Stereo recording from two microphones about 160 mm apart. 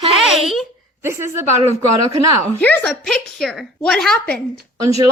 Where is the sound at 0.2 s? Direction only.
Centre (ahead or behind).